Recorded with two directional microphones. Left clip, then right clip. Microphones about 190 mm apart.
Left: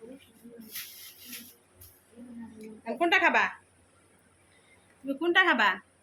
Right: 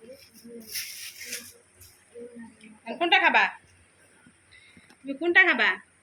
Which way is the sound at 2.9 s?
30° left (ahead or behind).